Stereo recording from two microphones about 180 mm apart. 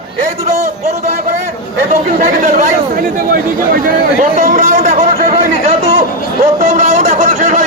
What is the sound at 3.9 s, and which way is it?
Speech, 45° right (ahead or behind).